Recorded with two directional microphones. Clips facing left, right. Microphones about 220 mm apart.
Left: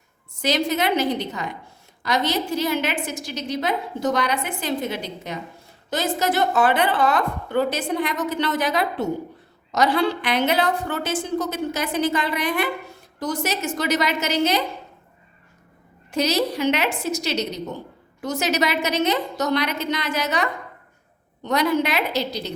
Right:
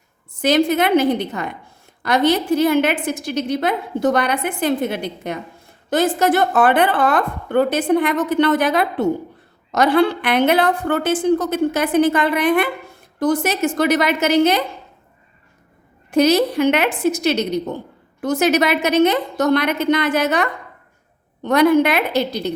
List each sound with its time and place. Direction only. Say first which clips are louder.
0.4 s a woman's voice: right 6 dB; 55° right (ahead or behind)
16.1 s a woman's voice: right 7 dB; 55° right (ahead or behind)